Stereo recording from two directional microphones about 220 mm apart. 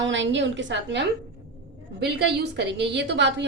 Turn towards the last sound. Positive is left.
turn(degrees=-50)  # may be behind; listen again after turning